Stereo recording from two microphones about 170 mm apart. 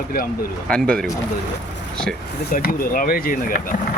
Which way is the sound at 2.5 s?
60° left (ahead or behind).